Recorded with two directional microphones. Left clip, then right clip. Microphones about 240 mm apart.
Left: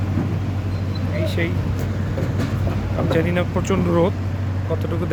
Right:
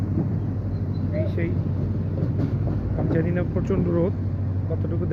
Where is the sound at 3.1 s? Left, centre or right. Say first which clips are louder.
Left 6 dB; centre.